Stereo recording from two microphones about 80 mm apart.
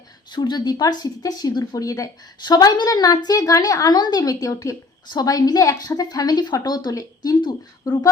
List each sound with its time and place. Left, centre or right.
0.3 s a woman's voice: left
5.0 s a woman's voice: left